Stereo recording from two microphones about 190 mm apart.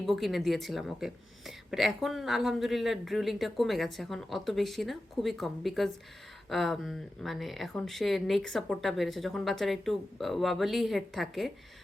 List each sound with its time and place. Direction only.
0.0 s a woman's voice: centre (ahead or behind)